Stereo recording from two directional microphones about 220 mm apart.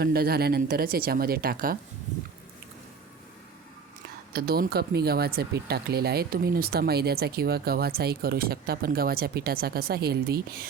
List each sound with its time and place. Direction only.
0.0 s speech: 45° right (ahead or behind)
4.3 s speech: 45° right (ahead or behind)